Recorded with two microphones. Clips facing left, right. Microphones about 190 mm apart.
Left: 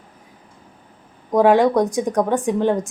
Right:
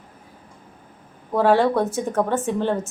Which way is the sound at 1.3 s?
15° left (ahead or behind).